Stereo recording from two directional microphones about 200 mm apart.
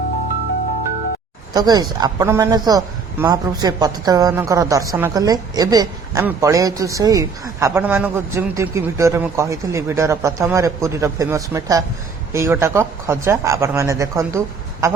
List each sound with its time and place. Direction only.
1.5 s speech: 20° right (ahead or behind)